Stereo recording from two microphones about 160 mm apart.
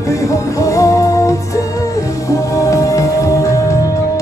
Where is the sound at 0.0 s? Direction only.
20° left (ahead or behind).